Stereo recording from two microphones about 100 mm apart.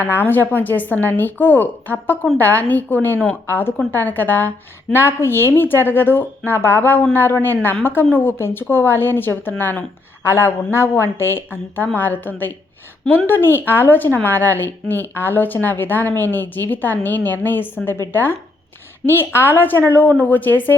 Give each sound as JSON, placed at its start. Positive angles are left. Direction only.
{"t": 0.0, "sound": "a woman's voice", "side_deg": 20}